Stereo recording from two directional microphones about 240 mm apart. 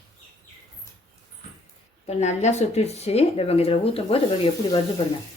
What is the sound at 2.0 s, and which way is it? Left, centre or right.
Speech, left.